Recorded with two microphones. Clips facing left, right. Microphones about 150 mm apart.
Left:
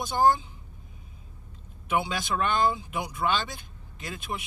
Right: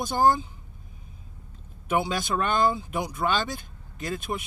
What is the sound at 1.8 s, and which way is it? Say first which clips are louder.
A man's voice: right 2 dB; 40° right (ahead or behind).